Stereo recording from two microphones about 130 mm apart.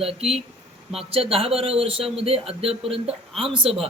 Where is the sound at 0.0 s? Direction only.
50° right (ahead or behind).